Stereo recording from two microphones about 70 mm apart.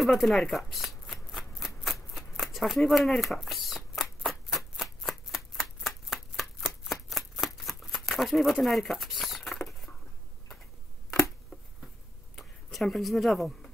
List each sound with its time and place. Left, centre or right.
0.0 s shuffling cards: centre
8.6 s speech: centre
9.7 s a sound: centre
12.4 s speech: centre